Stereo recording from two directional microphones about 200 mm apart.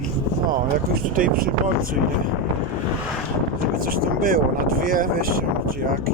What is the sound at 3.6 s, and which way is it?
Speech, 45° right (ahead or behind).